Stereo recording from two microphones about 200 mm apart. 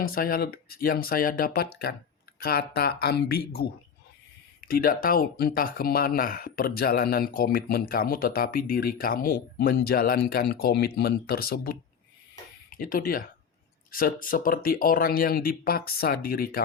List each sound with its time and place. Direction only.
0.0 s speech: 45° left (ahead or behind)